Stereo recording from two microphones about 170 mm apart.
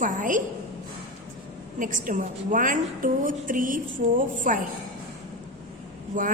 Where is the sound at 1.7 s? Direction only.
50° right (ahead or behind).